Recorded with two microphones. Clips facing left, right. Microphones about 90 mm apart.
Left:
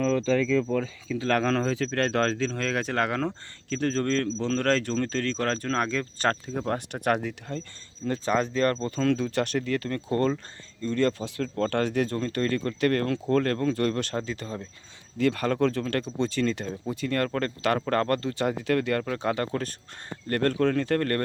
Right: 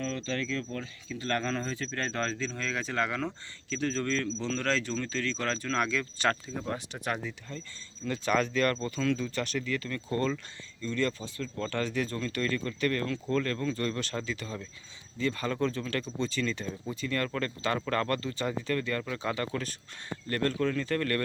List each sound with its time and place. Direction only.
1.3 s speech: 90° left; by 7.6 s 65° left (ahead or behind)
8.0 s speech: 40° left (ahead or behind)
8.3 s speech: 25° left (ahead or behind)
9.0 s speech: 55° left (ahead or behind)
11.3 s speech: 65° left (ahead or behind)
12.1 s speech: 40° left (ahead or behind)
15.2 s speech: 65° left (ahead or behind)
15.8 s speech: 50° left (ahead or behind)